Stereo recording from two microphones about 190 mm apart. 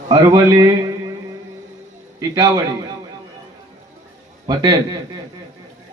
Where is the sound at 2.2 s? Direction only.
20° right (ahead or behind).